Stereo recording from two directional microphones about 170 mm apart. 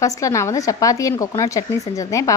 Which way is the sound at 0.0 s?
20° left (ahead or behind).